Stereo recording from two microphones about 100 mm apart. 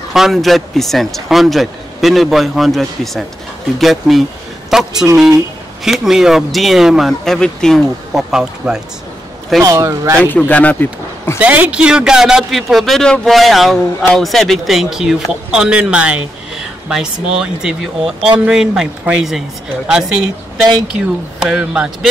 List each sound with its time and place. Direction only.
0.1 s a man's voice: centre (ahead or behind)
9.6 s speech: 35° right (ahead or behind)
10.2 s speech: 15° left (ahead or behind)
11.3 s a man's voice: 15° right (ahead or behind)